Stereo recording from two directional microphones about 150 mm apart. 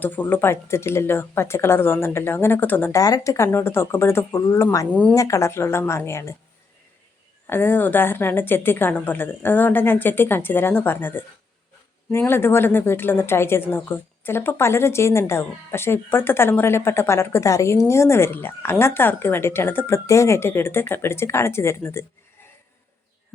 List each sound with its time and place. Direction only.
0.0 s speech: 15° left (ahead or behind)
4.9 s speech: 10° left (ahead or behind)
5.1 s speech: 20° left (ahead or behind)
7.4 s speech: 15° left (ahead or behind)